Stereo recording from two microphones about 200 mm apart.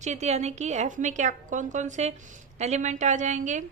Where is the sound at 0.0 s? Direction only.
35° right (ahead or behind).